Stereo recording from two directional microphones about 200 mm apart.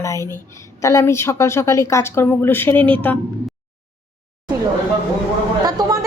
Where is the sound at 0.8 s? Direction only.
15° left (ahead or behind).